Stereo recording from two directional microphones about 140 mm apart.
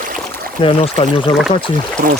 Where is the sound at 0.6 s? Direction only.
40° left (ahead or behind).